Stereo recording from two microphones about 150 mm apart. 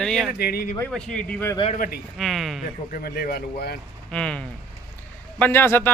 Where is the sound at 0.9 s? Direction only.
5° left (ahead or behind).